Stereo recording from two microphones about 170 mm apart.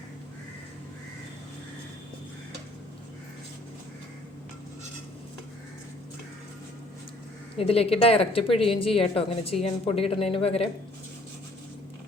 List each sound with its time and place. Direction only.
7.5 s a woman's voice: 35° left (ahead or behind)